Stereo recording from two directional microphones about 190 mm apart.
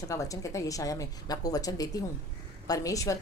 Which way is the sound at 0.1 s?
15° left (ahead or behind).